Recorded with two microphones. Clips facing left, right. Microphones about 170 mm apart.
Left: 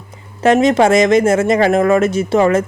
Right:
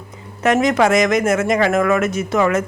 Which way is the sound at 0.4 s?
30° left (ahead or behind).